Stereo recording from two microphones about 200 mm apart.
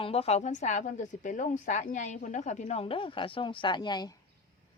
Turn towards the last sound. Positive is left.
turn(degrees=20)  # may be behind; listen again after turning